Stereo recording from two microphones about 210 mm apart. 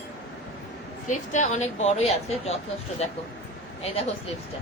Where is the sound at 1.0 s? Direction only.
35° left (ahead or behind).